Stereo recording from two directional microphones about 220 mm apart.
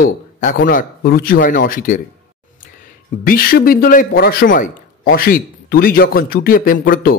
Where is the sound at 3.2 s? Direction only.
40° left (ahead or behind).